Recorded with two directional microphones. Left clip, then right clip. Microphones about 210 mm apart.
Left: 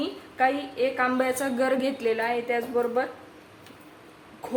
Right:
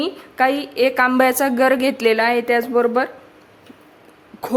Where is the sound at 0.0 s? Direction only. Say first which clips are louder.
Right 6 dB; 60° right (ahead or behind).